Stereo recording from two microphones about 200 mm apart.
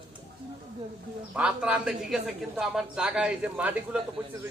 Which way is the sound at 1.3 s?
5° right (ahead or behind).